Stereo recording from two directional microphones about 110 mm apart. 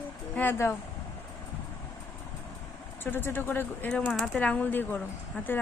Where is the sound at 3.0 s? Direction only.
20° left (ahead or behind).